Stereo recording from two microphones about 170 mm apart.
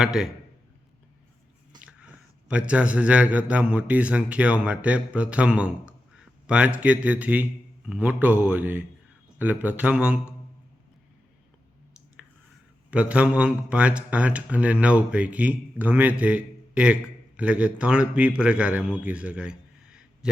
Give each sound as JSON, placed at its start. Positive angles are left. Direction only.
{"t": 0.0, "sound": "a man's voice", "side_deg": 0}
{"t": 1.8, "sound": "a man's voice", "side_deg": -5}
{"t": 12.9, "sound": "a man's voice", "side_deg": -5}